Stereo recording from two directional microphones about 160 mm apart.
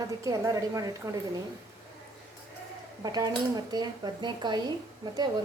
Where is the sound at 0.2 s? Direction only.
20° right (ahead or behind).